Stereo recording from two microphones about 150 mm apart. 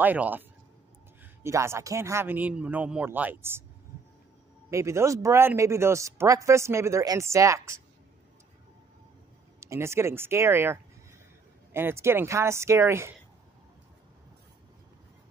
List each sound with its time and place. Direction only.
0.0 s a man's voice: 10° right (ahead or behind)
4.6 s speech: 20° right (ahead or behind)
9.6 s a man's voice: 15° right (ahead or behind)